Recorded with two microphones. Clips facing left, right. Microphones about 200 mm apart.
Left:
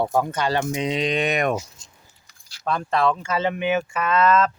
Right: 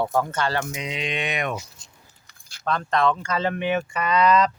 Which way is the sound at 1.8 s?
60° right (ahead or behind).